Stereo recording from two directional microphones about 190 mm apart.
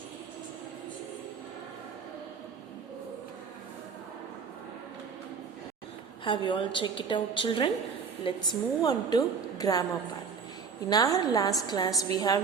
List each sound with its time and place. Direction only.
6.2 s a woman's voice: 25° left (ahead or behind)
10.8 s a woman's voice: 20° left (ahead or behind)